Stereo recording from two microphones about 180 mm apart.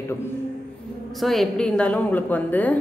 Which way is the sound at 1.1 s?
Centre (ahead or behind).